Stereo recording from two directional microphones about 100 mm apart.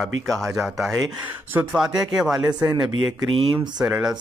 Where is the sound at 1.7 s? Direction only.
5° right (ahead or behind).